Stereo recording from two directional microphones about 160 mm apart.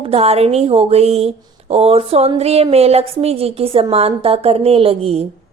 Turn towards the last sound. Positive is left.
turn(degrees=-40)  # may be behind; listen again after turning